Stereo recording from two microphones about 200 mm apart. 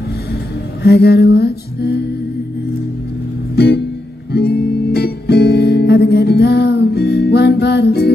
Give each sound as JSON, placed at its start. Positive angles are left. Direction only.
{"t": 0.8, "sound": "music", "side_deg": 55}
{"t": 3.5, "sound": "music", "side_deg": 55}